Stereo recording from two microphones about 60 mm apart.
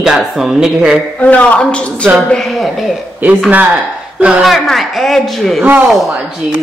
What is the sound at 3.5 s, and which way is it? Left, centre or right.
Speech, right.